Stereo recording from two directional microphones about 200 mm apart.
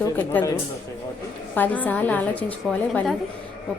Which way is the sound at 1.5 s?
10° left (ahead or behind).